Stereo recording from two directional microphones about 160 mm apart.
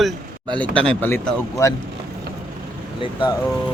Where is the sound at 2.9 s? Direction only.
30° left (ahead or behind).